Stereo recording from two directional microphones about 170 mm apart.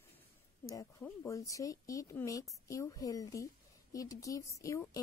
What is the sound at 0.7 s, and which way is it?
A woman's voice, 15° left (ahead or behind).